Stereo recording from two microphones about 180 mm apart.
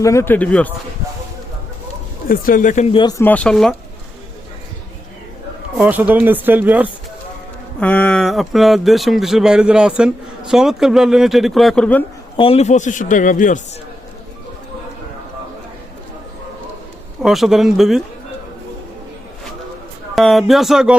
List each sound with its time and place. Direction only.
0.0 s speech: 15° left (ahead or behind)
2.3 s a man's voice: 50° left (ahead or behind); by 3.2 s 30° left (ahead or behind)
3.2 s speech: 10° left (ahead or behind)
5.7 s speech: 10° right (ahead or behind)
7.8 s speech: 10° left (ahead or behind)
12.4 s a man's voice: 35° left (ahead or behind)
17.2 s speech: centre (ahead or behind)
20.1 s speech: centre (ahead or behind)